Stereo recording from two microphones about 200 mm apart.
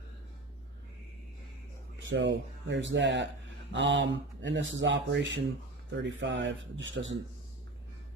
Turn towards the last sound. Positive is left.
turn(degrees=-70)  # may be behind; listen again after turning